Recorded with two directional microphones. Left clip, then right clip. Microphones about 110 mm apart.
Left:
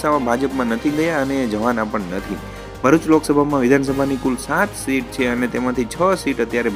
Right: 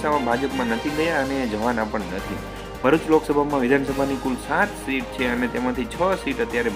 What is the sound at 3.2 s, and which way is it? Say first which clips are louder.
Speech: left 4 dB; 55° left (ahead or behind).